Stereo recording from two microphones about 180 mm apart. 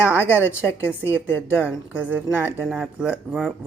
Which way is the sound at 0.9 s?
10° right (ahead or behind).